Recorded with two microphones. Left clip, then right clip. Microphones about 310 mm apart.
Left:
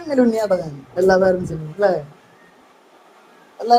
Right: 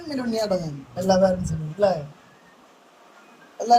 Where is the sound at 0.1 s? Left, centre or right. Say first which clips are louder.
Left 8 dB; centre.